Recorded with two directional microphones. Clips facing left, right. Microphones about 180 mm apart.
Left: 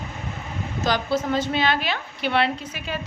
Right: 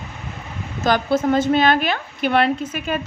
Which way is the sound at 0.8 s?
50° right (ahead or behind).